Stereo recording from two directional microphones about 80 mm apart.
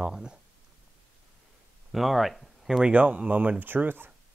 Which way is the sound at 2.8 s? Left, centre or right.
Centre.